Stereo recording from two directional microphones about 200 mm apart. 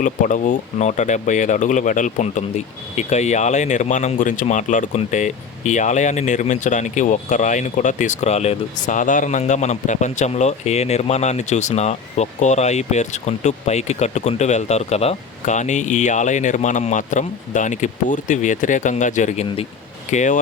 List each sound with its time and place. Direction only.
0.0 s speech: 40° left (ahead or behind)